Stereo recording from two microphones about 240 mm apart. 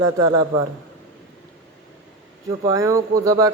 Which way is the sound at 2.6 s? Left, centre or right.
Centre.